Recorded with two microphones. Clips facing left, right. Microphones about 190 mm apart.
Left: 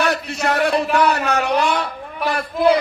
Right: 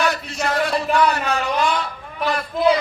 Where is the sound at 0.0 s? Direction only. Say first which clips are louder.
Left 2 dB; 65° left (ahead or behind).